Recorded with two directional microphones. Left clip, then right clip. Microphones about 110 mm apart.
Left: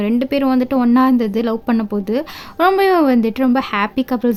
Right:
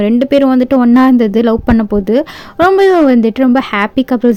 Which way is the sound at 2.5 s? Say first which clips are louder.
Right 5 dB; 25° right (ahead or behind).